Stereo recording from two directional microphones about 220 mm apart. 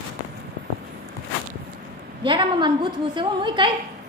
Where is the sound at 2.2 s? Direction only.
25° right (ahead or behind).